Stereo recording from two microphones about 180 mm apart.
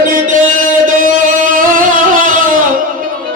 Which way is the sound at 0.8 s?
45° right (ahead or behind).